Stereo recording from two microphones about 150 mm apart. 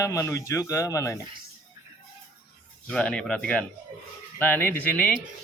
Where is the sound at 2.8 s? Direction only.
5° left (ahead or behind).